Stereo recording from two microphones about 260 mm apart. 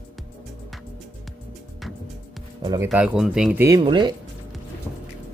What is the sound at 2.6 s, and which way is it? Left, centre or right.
Speech, centre.